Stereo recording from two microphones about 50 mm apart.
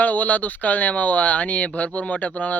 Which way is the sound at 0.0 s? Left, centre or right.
Left.